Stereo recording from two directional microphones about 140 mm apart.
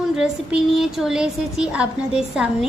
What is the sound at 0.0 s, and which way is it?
A woman's voice, 5° right (ahead or behind).